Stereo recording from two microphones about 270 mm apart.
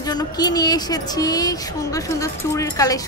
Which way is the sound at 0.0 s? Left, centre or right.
Centre.